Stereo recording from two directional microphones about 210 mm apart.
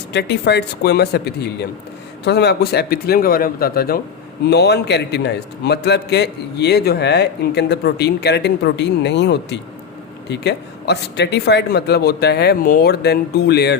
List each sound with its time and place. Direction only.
0.1 s a man's voice: 55° left (ahead or behind)